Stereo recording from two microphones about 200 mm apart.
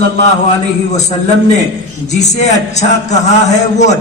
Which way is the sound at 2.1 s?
35° left (ahead or behind).